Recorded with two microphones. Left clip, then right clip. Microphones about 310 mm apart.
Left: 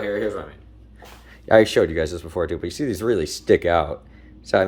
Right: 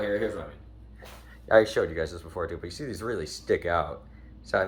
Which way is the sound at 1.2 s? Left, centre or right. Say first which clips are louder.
Left 6 dB; left.